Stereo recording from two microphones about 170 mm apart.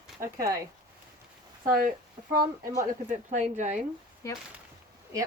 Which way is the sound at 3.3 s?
45° right (ahead or behind).